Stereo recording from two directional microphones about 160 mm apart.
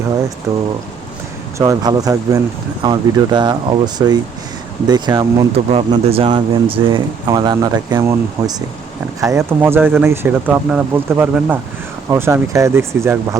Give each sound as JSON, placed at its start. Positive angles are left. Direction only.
{"t": 1.5, "sound": "speech", "side_deg": -20}
{"t": 5.7, "sound": "speech", "side_deg": -35}